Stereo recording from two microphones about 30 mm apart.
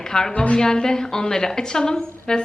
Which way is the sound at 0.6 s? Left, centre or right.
Left.